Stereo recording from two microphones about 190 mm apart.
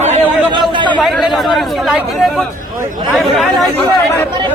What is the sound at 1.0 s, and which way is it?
Speech, centre (ahead or behind).